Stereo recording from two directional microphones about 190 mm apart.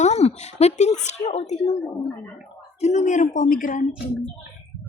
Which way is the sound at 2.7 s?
35° left (ahead or behind).